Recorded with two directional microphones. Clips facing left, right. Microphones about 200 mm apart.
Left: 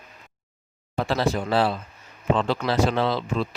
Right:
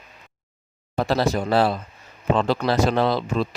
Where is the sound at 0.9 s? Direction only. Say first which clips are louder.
Right 2 dB; 40° right (ahead or behind).